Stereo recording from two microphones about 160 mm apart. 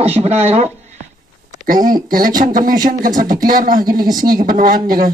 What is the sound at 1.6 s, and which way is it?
Speech, 60° right (ahead or behind).